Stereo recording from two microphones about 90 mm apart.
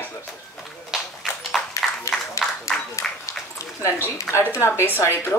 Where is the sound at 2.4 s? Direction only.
35° left (ahead or behind).